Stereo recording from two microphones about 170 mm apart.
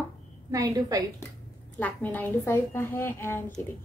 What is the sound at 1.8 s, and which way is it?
A woman's voice, 10° left (ahead or behind).